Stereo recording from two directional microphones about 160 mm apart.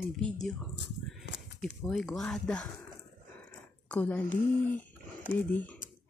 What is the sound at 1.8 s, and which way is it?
Speech, centre (ahead or behind).